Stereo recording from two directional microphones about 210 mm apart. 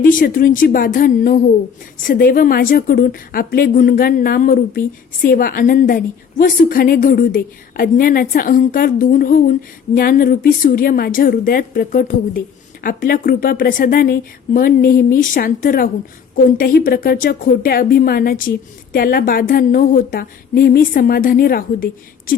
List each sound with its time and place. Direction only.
0.0 s a woman's voice: 40° left (ahead or behind)